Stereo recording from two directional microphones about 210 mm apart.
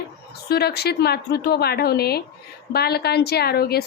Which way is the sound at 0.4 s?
50° left (ahead or behind).